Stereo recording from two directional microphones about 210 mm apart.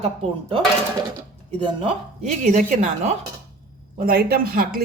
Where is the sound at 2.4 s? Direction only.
40° right (ahead or behind).